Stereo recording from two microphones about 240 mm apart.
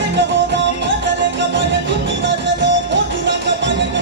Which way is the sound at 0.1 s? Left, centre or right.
Right.